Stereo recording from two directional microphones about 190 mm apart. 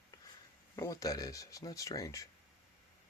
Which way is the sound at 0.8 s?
20° left (ahead or behind).